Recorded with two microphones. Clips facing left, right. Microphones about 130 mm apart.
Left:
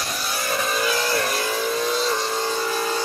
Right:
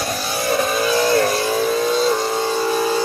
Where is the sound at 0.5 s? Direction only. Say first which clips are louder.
Right 5 dB; 25° right (ahead or behind).